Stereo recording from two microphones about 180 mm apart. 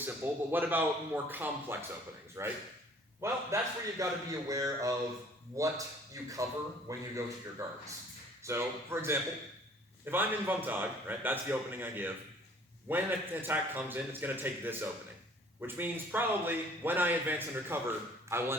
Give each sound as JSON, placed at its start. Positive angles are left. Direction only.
{"t": 0.0, "sound": "a man's voice", "side_deg": -10}